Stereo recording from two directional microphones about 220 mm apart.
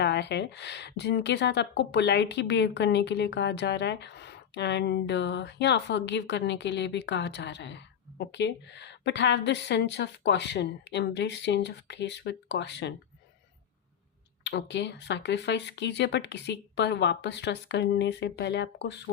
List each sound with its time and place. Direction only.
0.0 s speech: 50° left (ahead or behind)
14.4 s speech: 50° left (ahead or behind)